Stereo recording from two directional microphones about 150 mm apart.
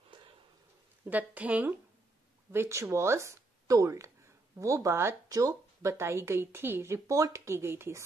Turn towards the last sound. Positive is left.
turn(degrees=-15)  # may be behind; listen again after turning